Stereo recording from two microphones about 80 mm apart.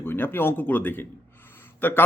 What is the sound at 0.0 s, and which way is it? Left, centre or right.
Speech, left.